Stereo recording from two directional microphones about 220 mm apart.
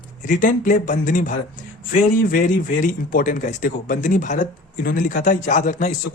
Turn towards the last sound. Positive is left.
turn(degrees=35)  # may be behind; listen again after turning